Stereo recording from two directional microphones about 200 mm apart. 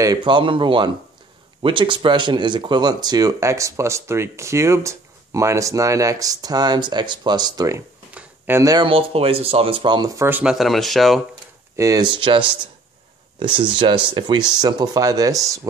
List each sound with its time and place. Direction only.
0.0 s speech: 20° right (ahead or behind); by 11.2 s centre (ahead or behind)
11.7 s speech: 15° right (ahead or behind)